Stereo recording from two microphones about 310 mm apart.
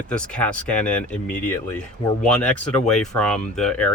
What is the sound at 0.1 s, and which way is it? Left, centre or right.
Speech, centre.